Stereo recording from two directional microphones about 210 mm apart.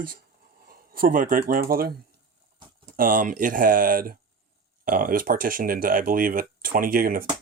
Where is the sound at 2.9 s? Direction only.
40° right (ahead or behind).